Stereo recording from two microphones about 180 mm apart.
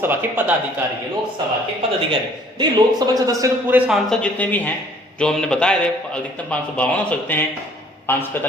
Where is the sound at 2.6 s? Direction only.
20° right (ahead or behind).